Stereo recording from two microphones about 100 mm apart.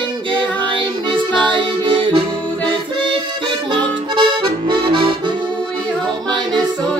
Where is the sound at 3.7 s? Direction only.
55° right (ahead or behind).